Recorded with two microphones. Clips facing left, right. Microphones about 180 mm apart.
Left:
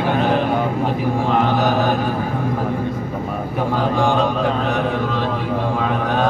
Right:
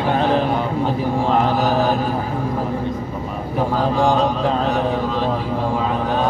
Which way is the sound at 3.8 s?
35° right (ahead or behind).